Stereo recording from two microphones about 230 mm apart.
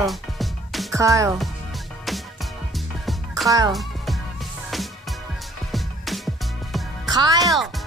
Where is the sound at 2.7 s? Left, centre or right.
Centre.